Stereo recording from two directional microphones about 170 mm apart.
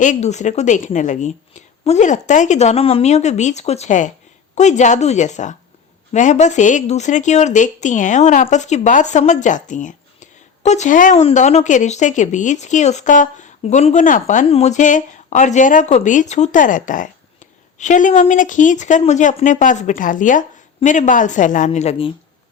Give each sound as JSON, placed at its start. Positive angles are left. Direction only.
{"t": 0.0, "sound": "speech", "side_deg": 45}